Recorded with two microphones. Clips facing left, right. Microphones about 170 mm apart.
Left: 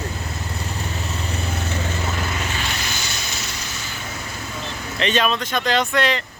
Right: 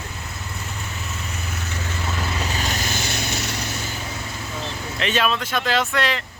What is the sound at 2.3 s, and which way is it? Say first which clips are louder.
Vehicle: right 1 dB; 35° right (ahead or behind).